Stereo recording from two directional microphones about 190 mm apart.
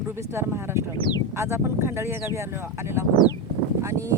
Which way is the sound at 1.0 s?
25° left (ahead or behind).